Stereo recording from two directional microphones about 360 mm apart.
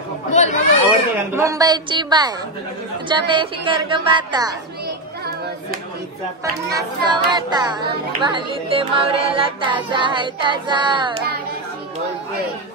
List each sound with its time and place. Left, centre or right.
0.3 s speech: centre
1.3 s music: centre
4.8 s children playing: right
6.7 s music: centre